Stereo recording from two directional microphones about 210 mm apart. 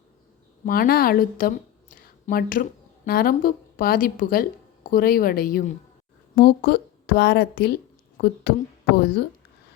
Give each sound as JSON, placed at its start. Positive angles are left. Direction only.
{"t": 0.6, "sound": "a woman's voice", "side_deg": 45}